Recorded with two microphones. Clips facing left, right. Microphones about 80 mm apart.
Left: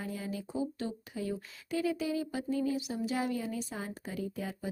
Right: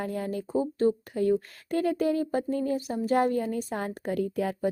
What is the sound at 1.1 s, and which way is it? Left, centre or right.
A woman's voice, right.